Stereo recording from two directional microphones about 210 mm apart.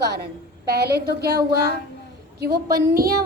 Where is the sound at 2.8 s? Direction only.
45° right (ahead or behind).